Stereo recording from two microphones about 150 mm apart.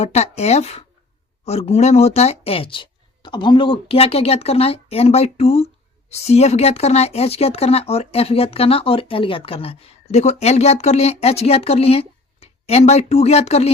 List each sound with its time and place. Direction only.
0.0 s speech: 45° left (ahead or behind)